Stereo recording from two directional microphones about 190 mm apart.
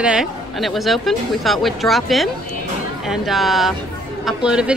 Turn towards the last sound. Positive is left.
turn(degrees=-5)  # may be behind; listen again after turning